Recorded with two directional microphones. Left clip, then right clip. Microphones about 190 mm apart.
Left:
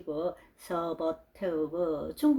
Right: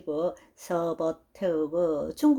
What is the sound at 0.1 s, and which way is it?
Speech, 40° right (ahead or behind).